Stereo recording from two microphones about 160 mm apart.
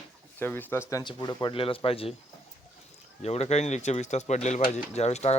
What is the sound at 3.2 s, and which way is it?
Speech, 40° left (ahead or behind).